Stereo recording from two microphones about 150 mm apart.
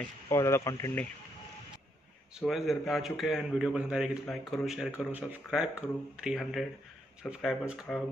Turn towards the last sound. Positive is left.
turn(degrees=0)  # may be behind; listen again after turning